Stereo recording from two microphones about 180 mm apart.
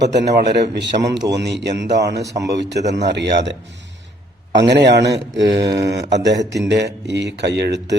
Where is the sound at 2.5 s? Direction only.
70° right (ahead or behind).